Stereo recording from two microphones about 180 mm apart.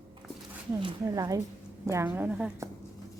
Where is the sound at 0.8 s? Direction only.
25° right (ahead or behind); by 2.5 s 5° right (ahead or behind).